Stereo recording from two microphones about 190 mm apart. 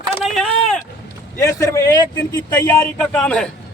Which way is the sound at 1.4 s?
15° left (ahead or behind).